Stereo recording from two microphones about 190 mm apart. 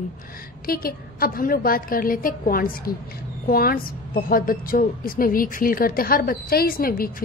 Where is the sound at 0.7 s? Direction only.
50° left (ahead or behind).